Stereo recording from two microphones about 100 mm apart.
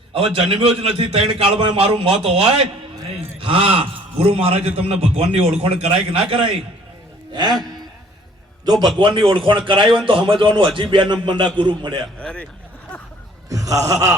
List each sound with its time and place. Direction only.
0.3 s a man's voice: 65° right (ahead or behind); by 6.2 s 85° right
8.6 s a man's voice: 45° right (ahead or behind)
9.0 s a man's voice: 55° right (ahead or behind)
12.2 s speech: 10° left (ahead or behind)
13.5 s a man's voice: 35° right (ahead or behind)